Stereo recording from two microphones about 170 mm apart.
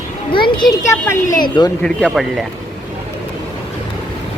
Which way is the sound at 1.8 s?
5° left (ahead or behind).